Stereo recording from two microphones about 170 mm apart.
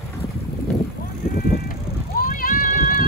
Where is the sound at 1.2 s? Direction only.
60° left (ahead or behind).